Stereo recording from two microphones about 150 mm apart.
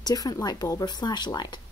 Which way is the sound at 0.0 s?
25° left (ahead or behind).